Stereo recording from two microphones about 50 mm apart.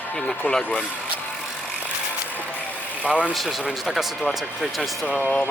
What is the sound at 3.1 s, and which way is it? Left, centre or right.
Speech, right.